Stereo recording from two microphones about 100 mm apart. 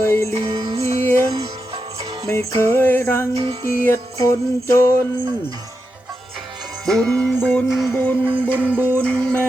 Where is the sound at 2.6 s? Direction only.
20° left (ahead or behind).